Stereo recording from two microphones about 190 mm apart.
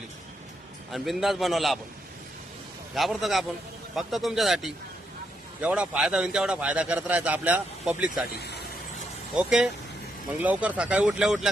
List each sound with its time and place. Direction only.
0.9 s speech: centre (ahead or behind)
2.9 s a man's voice: centre (ahead or behind)
8.4 s vehicle: 60° left (ahead or behind)
9.3 s speech: 5° right (ahead or behind)